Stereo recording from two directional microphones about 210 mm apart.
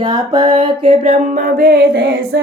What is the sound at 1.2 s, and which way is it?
Music, 45° right (ahead or behind).